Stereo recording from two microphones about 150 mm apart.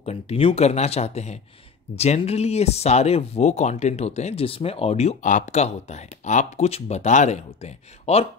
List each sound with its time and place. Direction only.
0.0 s speech: 45° left (ahead or behind)